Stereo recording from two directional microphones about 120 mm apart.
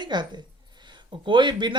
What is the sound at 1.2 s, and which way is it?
Speech, 40° right (ahead or behind).